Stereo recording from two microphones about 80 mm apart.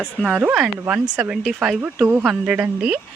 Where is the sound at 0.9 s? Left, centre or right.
Centre.